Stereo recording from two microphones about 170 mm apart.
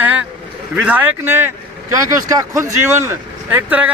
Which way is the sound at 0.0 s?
10° right (ahead or behind).